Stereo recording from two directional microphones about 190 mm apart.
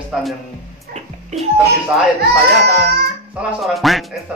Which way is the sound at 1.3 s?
35° right (ahead or behind).